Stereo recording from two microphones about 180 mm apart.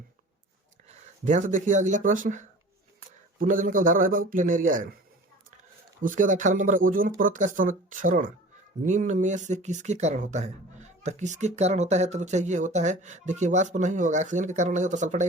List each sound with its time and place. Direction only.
0.9 s a man's voice: 45° right (ahead or behind)
6.0 s a man's voice: 45° right (ahead or behind)